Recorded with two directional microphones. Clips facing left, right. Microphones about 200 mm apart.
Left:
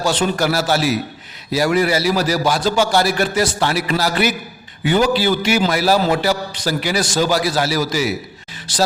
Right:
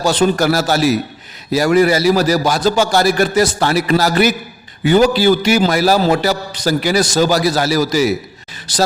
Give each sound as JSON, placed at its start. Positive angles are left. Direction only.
{"t": 0.0, "sound": "a man's voice", "side_deg": -40}